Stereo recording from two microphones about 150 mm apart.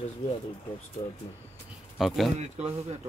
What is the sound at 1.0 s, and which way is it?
Speech, 30° left (ahead or behind).